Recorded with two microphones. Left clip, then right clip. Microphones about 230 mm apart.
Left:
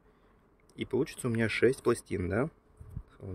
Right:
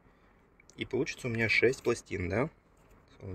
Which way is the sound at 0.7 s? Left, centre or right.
Centre.